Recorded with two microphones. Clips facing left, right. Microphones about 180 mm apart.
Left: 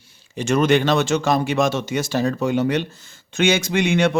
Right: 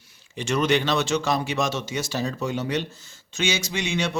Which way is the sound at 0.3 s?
50° left (ahead or behind).